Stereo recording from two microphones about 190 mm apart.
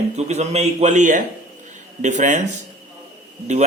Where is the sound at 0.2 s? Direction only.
35° right (ahead or behind).